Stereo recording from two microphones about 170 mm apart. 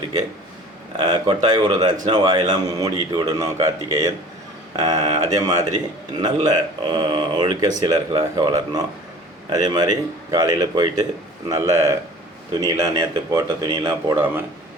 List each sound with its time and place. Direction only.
0.9 s a man's voice: 25° right (ahead or behind)